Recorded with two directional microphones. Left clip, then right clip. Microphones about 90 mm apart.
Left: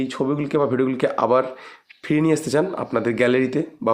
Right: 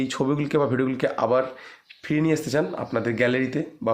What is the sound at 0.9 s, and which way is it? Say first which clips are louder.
Speech: left 3 dB; 25° left (ahead or behind).